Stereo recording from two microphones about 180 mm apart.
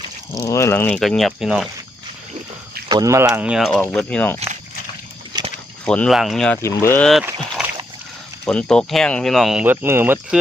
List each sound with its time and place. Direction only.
0.3 s speech: 15° left (ahead or behind); by 1.6 s centre (ahead or behind)
2.9 s speech: 20° right (ahead or behind); by 4.4 s 5° left (ahead or behind)
5.3 s a sound: 25° right (ahead or behind)
5.8 s speech: 5° left (ahead or behind)
6.6 s speech: 15° left (ahead or behind)
7.6 s rowboat: 5° right (ahead or behind)
8.4 s speech: 5° left (ahead or behind); by 10.2 s 10° right (ahead or behind)